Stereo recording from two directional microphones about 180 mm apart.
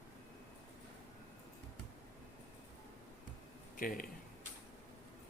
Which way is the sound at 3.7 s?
50° left (ahead or behind).